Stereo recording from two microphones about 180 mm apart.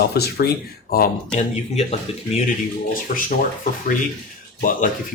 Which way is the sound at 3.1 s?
50° left (ahead or behind).